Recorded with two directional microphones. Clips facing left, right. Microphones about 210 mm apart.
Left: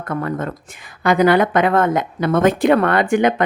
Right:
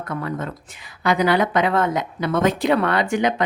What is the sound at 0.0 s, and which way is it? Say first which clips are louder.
Speech: left 4 dB; 50° left (ahead or behind).